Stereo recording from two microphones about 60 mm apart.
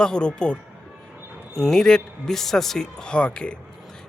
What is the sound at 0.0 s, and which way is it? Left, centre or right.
A man's voice, centre.